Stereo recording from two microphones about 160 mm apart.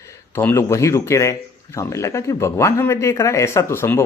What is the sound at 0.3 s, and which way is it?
A man's voice, 15° left (ahead or behind).